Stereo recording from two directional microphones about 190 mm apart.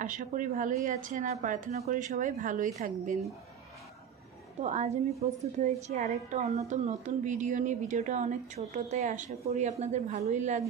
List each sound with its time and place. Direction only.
0.0 s a woman's voice: 40° right (ahead or behind)
4.6 s a woman's voice: 40° right (ahead or behind)